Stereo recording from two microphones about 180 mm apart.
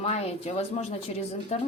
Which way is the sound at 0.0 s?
35° left (ahead or behind).